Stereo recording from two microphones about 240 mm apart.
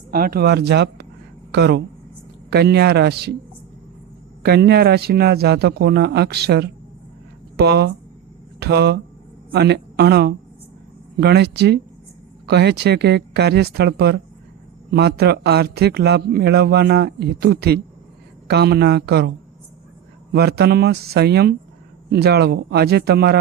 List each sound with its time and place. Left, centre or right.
0.1 s a man's voice: right
4.4 s a man's voice: right
20.3 s a man's voice: right